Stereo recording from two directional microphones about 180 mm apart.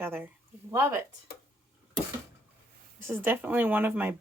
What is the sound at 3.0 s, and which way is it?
Speech, 15° right (ahead or behind).